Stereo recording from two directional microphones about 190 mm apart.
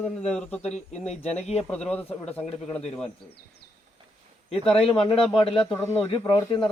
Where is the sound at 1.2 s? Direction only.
35° left (ahead or behind).